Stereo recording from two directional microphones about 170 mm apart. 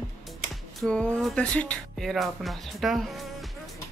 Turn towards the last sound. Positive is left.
turn(degrees=0)  # may be behind; listen again after turning